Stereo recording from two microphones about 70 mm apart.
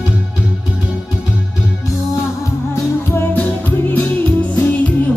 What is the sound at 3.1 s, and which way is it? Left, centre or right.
Music, left.